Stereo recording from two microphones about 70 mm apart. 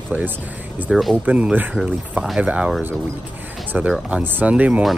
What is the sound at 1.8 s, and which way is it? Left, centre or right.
Speech, centre.